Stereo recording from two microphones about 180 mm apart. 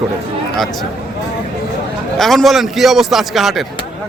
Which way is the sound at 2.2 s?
Centre (ahead or behind).